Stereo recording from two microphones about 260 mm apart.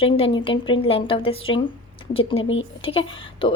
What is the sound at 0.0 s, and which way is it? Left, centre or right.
A woman's voice, left.